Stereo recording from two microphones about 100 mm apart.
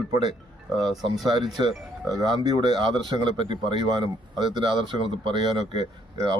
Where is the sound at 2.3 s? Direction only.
45° right (ahead or behind).